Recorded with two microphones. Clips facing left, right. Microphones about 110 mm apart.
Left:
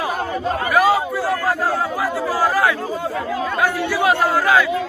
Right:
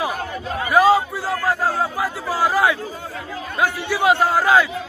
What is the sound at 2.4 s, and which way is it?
A man's voice, 15° right (ahead or behind).